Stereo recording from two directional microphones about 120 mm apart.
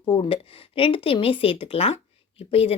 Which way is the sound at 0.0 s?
45° left (ahead or behind).